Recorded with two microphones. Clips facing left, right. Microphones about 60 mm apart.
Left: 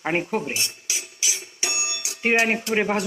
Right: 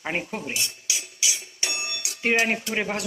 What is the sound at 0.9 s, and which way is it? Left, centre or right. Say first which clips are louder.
Music: right 3 dB; left.